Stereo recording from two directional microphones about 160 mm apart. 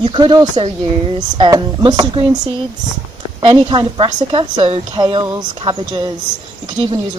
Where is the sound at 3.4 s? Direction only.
30° right (ahead or behind).